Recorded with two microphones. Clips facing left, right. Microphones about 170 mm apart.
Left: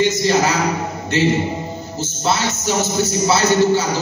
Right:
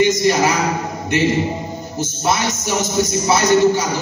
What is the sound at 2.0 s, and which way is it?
Music, 15° right (ahead or behind).